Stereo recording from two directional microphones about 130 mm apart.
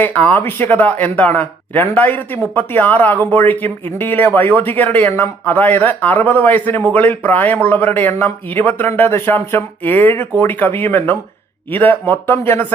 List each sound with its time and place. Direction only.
0.0 s speech: 15° left (ahead or behind)